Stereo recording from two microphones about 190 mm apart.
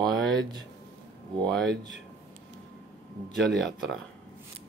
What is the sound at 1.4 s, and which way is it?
Speech, centre (ahead or behind).